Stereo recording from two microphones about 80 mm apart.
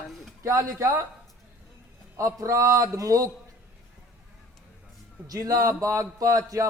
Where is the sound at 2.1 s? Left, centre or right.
Right.